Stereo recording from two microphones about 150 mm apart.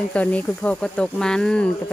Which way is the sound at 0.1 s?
10° left (ahead or behind).